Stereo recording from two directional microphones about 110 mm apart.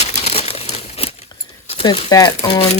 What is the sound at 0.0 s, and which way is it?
Crumpling, 75° left (ahead or behind).